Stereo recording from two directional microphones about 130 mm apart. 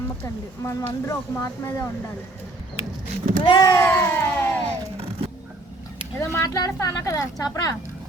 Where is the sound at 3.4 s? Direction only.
35° left (ahead or behind).